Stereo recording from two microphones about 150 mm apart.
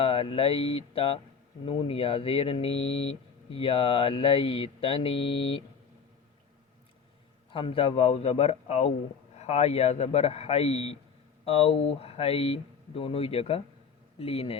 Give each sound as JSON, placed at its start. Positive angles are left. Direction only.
{"t": 0.0, "sound": "speech", "side_deg": 35}
{"t": 7.5, "sound": "speech", "side_deg": 35}